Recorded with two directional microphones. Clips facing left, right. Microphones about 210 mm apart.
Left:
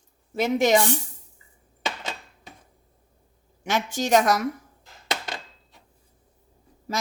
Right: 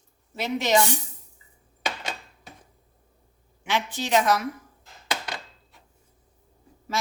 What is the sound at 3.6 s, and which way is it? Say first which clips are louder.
Speech: left 3 dB; 45° left (ahead or behind).